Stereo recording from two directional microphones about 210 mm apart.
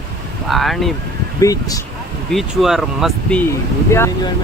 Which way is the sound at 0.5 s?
Centre (ahead or behind).